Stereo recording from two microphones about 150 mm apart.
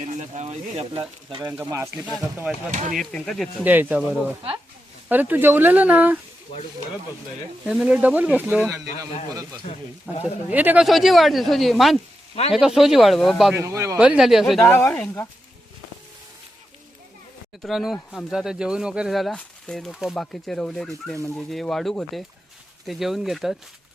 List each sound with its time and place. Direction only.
0.0 s speech: 55° right (ahead or behind); by 1.5 s 35° right (ahead or behind)
1.5 s speech: 20° right (ahead or behind)
2.7 s speech: 55° right (ahead or behind)
3.0 s speech: 5° left (ahead or behind)
3.6 s speech: 10° right (ahead or behind)
7.6 s speech: 5° right (ahead or behind)
9.3 s speech: 20° right (ahead or behind)
10.1 s speech: 10° right (ahead or behind)
10.8 s speech: centre (ahead or behind)
13.6 s speech: 20° right (ahead or behind)
14.0 s speech: 5° right (ahead or behind)
14.7 s speech: 15° left (ahead or behind)
17.6 s speech: centre (ahead or behind)